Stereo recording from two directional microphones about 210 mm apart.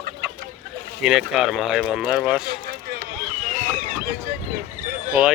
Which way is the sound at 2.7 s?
45° right (ahead or behind).